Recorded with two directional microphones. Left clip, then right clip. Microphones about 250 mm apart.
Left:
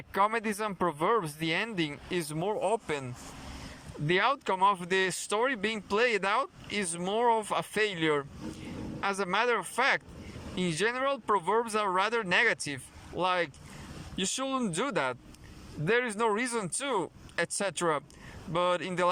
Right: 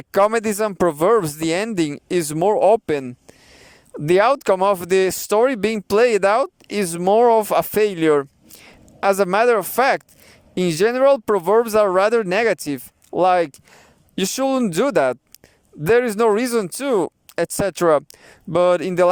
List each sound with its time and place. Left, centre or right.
0.1 s speech: right